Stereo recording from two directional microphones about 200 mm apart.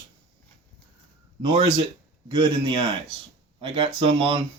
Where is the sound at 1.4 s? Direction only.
30° right (ahead or behind).